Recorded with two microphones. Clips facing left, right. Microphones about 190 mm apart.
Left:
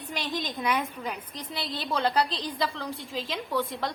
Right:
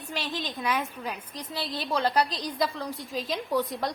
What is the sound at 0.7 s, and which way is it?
A woman's voice, 10° right (ahead or behind).